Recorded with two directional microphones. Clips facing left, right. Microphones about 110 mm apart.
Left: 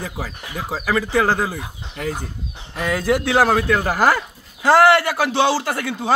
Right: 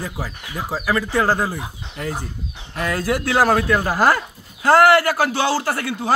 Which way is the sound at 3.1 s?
20° left (ahead or behind).